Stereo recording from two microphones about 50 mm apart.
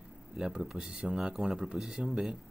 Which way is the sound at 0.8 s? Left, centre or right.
Centre.